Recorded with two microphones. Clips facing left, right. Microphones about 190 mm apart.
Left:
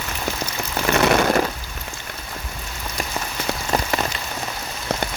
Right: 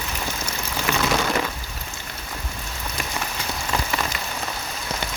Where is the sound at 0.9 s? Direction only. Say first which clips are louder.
Left 6 dB; 60° left (ahead or behind).